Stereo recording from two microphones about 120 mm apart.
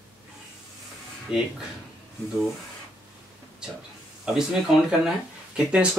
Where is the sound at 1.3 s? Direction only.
10° right (ahead or behind).